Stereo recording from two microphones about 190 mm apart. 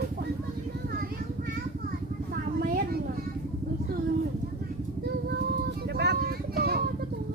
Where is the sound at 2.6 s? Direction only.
50° right (ahead or behind).